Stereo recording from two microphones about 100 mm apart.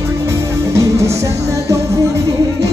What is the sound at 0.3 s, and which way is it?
Music, 30° right (ahead or behind).